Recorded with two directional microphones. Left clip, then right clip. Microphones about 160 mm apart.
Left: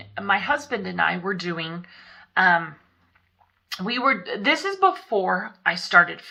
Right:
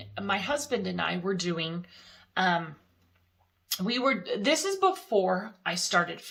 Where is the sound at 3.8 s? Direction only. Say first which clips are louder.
Left 6 dB; 40° right (ahead or behind).